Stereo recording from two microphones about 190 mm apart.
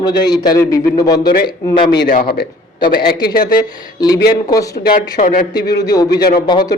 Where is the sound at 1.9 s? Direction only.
60° left (ahead or behind).